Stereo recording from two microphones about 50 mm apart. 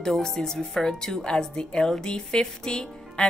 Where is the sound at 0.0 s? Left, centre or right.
Centre.